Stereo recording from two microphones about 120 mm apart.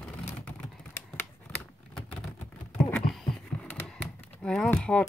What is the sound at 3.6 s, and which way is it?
Typing, 10° left (ahead or behind).